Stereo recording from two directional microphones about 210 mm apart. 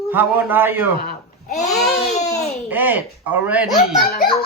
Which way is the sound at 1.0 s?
35° left (ahead or behind).